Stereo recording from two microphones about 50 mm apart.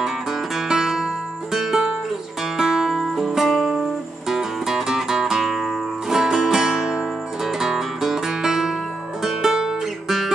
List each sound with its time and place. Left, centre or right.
0.0 s music: centre